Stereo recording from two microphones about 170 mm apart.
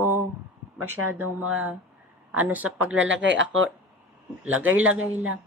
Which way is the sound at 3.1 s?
90° right.